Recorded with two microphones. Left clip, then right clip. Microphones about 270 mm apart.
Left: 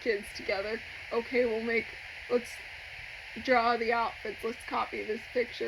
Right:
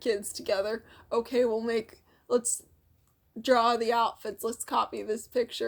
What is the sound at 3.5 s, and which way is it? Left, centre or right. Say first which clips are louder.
Speech: right 2 dB; right.